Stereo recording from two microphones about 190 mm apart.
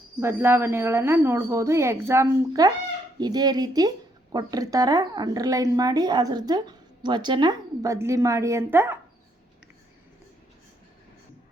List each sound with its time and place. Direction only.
0.2 s speech: 10° right (ahead or behind)